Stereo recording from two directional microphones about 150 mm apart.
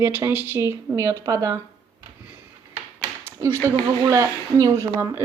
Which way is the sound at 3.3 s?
15° right (ahead or behind).